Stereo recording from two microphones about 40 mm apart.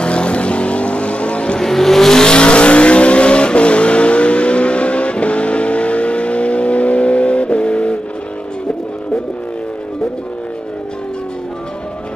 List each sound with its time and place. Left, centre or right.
0.0 s vehicle: left
1.6 s vehicle: centre; by 8.0 s left